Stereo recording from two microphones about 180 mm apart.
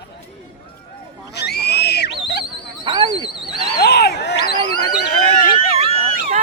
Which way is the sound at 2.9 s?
25° right (ahead or behind).